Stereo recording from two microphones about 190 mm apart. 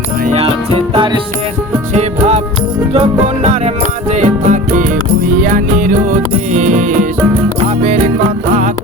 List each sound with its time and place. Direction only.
0.9 s music: 25° right (ahead or behind)
1.9 s music: 35° right (ahead or behind)
4.1 s music: 40° right (ahead or behind)